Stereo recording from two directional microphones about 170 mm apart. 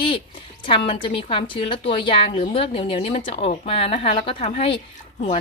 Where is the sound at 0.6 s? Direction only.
30° left (ahead or behind).